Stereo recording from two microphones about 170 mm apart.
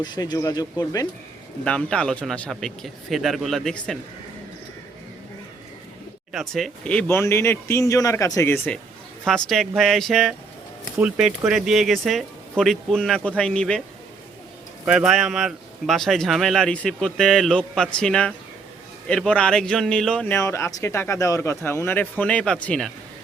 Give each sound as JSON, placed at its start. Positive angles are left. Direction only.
{"t": 0.0, "sound": "speech", "side_deg": 25}
{"t": 1.6, "sound": "a man's voice", "side_deg": 5}
{"t": 6.3, "sound": "a man's voice", "side_deg": 0}
{"t": 14.8, "sound": "a man's voice", "side_deg": -5}